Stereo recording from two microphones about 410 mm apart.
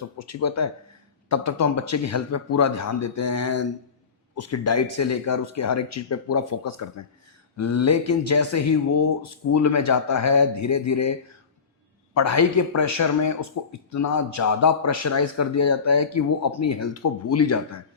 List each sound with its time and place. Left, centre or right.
0.2 s a man's voice: left
12.1 s a man's voice: left